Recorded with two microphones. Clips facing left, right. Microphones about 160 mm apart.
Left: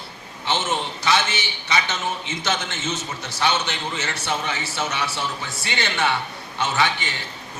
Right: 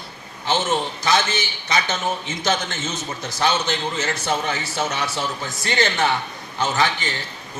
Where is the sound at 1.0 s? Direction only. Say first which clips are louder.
Right 1 dB; 40° right (ahead or behind).